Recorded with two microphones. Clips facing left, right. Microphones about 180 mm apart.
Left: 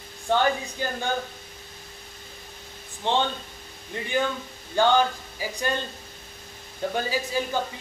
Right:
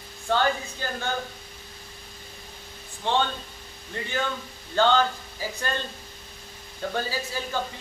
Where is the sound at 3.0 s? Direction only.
20° left (ahead or behind).